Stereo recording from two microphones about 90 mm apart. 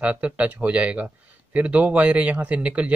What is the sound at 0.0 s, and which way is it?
Speech, 15° right (ahead or behind).